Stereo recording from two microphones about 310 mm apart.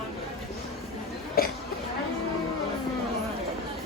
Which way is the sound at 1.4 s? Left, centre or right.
Left.